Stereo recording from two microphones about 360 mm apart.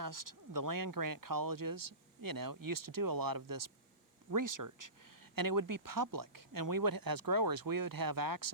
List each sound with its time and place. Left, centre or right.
0.0 s speech: right